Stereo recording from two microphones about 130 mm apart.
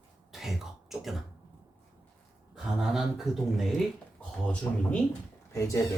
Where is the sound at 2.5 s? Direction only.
5° right (ahead or behind).